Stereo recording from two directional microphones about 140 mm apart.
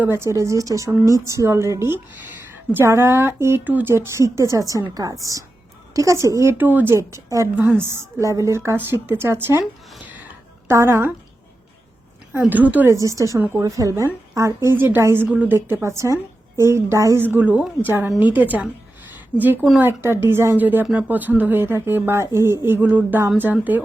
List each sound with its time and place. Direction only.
0.0 s speech: 20° right (ahead or behind)
10.7 s speech: 20° right (ahead or behind)
12.3 s a woman's voice: 10° right (ahead or behind)
19.8 s a woman's voice: 15° right (ahead or behind)